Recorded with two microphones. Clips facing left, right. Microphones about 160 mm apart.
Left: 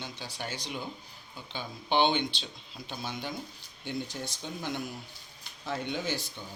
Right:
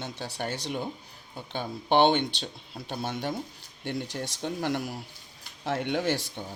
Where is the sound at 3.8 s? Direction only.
75° right (ahead or behind).